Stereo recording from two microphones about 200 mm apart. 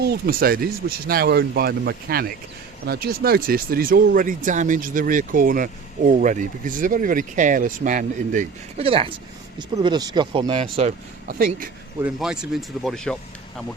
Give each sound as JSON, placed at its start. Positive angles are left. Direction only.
{"t": 0.0, "sound": "speech", "side_deg": -50}
{"t": 8.8, "sound": "speech", "side_deg": -30}
{"t": 11.3, "sound": "speech", "side_deg": -45}
{"t": 12.0, "sound": "speech", "side_deg": -5}